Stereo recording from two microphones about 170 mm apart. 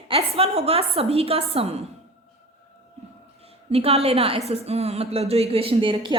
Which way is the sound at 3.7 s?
35° right (ahead or behind).